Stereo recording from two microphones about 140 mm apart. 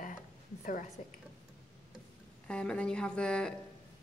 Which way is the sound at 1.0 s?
50° left (ahead or behind).